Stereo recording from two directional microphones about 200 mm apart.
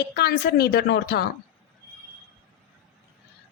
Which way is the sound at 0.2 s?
50° left (ahead or behind).